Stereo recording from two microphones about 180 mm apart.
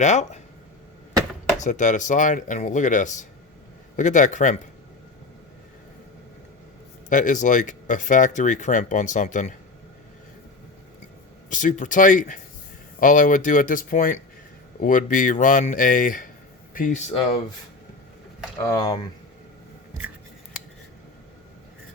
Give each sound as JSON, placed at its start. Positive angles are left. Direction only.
{"t": 0.0, "sound": "speech", "side_deg": 40}
{"t": 1.5, "sound": "speech", "side_deg": 45}
{"t": 7.1, "sound": "speech", "side_deg": 45}
{"t": 11.4, "sound": "speech", "side_deg": 45}
{"t": 18.7, "sound": "speech", "side_deg": 20}